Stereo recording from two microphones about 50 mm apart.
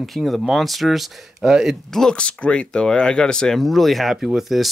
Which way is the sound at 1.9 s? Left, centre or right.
Centre.